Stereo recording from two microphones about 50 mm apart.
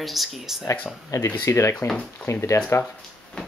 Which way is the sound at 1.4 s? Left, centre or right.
Left.